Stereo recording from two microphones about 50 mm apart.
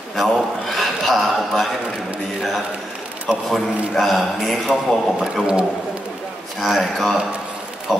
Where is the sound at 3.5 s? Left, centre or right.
Centre.